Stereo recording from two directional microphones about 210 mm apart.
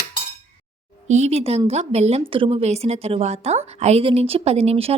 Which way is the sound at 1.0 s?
35° right (ahead or behind).